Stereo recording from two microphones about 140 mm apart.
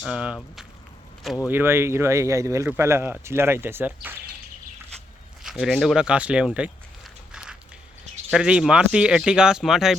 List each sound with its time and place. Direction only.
0.0 s speech: 5° right (ahead or behind)
1.5 s speech: 15° right (ahead or behind)
5.4 s speech: 5° right (ahead or behind)
8.3 s speech: 5° right (ahead or behind)